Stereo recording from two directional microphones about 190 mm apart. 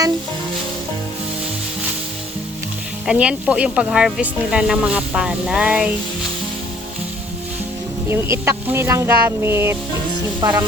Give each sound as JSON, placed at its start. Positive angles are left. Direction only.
{"t": 3.1, "sound": "speech", "side_deg": -5}
{"t": 8.0, "sound": "speech", "side_deg": -15}